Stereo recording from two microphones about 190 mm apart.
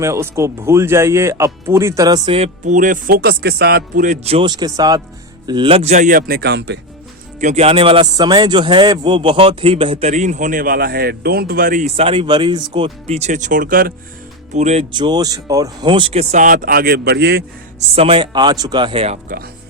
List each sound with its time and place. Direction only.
0.0 s a man's voice: 15° right (ahead or behind); by 6.7 s 65° right (ahead or behind)
7.3 s a man's voice: 35° right (ahead or behind)
14.5 s a man's voice: 35° right (ahead or behind); by 17.4 s 60° right (ahead or behind)
17.7 s speech: 30° right (ahead or behind)